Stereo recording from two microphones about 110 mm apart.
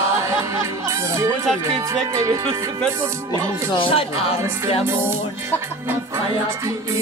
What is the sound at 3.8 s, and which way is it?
Speech, 55° left (ahead or behind).